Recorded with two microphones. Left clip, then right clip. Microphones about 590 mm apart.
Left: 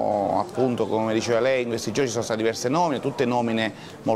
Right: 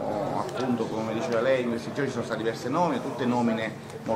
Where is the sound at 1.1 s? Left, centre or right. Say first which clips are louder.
Left 1 dB; left.